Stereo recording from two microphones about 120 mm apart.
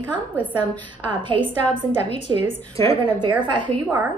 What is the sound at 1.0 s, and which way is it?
Speech, 45° right (ahead or behind).